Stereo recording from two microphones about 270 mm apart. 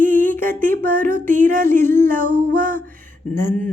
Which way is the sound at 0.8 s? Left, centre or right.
Right.